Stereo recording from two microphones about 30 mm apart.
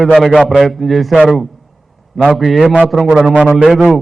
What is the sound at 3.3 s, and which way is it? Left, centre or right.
Speech, right.